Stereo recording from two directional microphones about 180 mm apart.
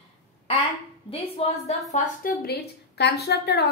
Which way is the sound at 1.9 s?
50° left (ahead or behind).